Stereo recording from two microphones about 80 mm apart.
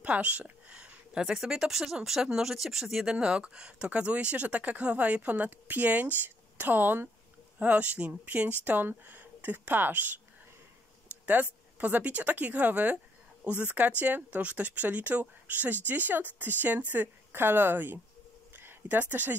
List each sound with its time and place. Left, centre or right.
0.0 s speech: centre
11.2 s speech: right
18.5 s a sound: right